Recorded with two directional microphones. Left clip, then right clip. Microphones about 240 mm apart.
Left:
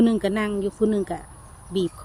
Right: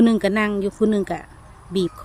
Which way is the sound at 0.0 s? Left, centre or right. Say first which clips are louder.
Right 4 dB; centre.